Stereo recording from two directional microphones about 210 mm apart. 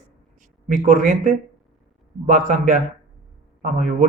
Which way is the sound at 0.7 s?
35° right (ahead or behind).